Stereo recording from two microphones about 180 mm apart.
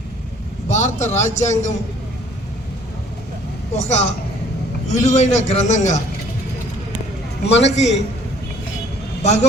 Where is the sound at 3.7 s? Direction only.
40° left (ahead or behind).